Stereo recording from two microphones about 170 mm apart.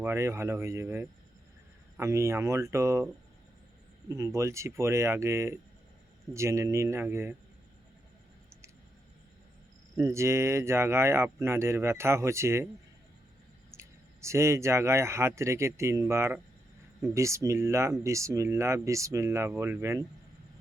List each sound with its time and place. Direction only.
0.0 s speech: 15° right (ahead or behind)
4.1 s speech: 15° right (ahead or behind)
9.9 s speech: 15° right (ahead or behind)
13.7 s speech: 15° right (ahead or behind)